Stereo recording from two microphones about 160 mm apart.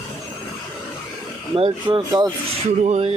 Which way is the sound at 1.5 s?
35° right (ahead or behind).